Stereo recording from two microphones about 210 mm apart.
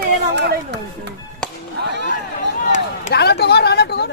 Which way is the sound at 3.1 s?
50° left (ahead or behind).